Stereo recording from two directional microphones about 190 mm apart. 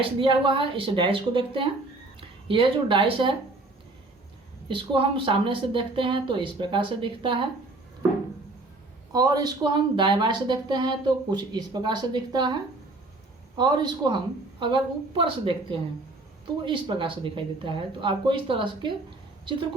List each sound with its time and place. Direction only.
0.0 s speech: 30° right (ahead or behind)
4.7 s speech: 25° right (ahead or behind)
9.1 s speech: 20° right (ahead or behind)
13.6 s speech: 25° right (ahead or behind)